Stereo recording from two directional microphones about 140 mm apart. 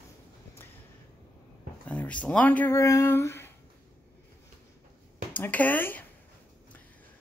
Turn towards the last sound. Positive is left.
turn(degrees=15)  # may be behind; listen again after turning